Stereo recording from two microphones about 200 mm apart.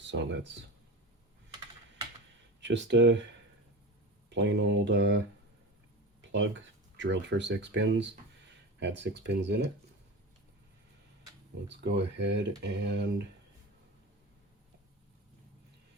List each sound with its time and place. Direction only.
0.1 s speech: 65° right (ahead or behind)
2.6 s speech: 60° right (ahead or behind)
4.3 s speech: 60° right (ahead or behind)
6.9 s speech: 65° right (ahead or behind)
11.7 s speech: 60° right (ahead or behind)